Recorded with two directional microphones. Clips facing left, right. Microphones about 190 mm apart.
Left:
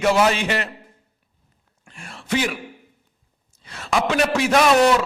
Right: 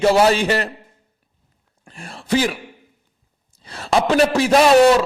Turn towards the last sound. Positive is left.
turn(degrees=-35)  # may be behind; listen again after turning